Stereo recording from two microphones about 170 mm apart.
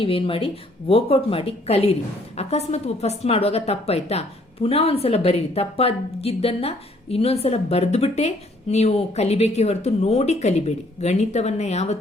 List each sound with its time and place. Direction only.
0.0 s speech: 30° left (ahead or behind)